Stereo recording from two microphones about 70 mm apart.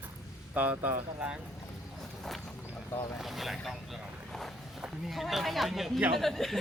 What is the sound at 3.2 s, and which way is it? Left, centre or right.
Speech, centre.